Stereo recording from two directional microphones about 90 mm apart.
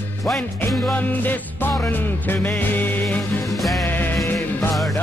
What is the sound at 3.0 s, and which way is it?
Music, 5° left (ahead or behind).